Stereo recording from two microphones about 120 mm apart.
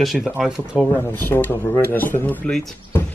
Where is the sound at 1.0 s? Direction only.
15° left (ahead or behind).